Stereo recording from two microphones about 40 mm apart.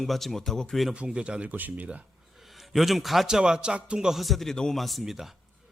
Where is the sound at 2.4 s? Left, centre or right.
Centre.